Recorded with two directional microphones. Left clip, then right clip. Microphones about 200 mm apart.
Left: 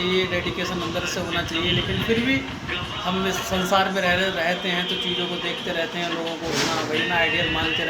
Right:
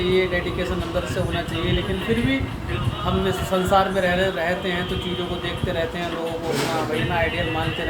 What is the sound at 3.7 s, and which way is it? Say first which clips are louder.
Speech: right 1 dB; 5° right (ahead or behind).